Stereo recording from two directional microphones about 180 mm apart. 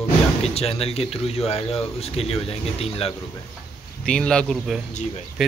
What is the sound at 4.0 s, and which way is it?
Speech, 5° left (ahead or behind).